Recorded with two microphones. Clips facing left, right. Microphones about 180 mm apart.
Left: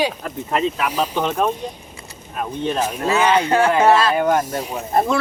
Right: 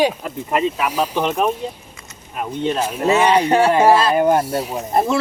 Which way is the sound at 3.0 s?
30° right (ahead or behind).